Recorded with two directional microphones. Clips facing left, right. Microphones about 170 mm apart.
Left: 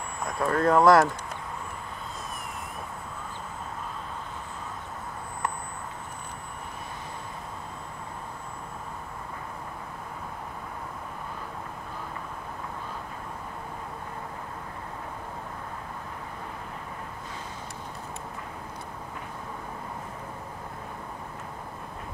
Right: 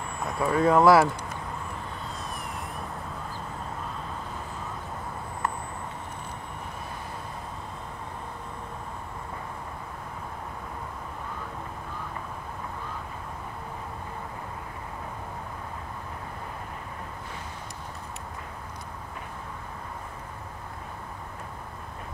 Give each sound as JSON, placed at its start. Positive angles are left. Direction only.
{"t": 0.3, "sound": "speech", "side_deg": -5}